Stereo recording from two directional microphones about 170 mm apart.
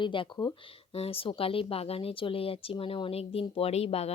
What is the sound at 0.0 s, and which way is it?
Speech, 30° left (ahead or behind).